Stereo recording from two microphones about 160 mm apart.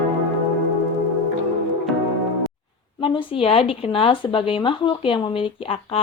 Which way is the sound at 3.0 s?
30° left (ahead or behind).